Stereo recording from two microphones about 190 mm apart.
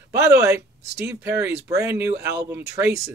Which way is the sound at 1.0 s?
10° right (ahead or behind).